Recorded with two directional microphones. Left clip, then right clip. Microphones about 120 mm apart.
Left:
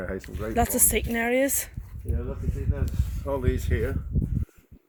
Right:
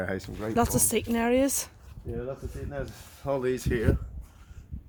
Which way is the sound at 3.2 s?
45° right (ahead or behind).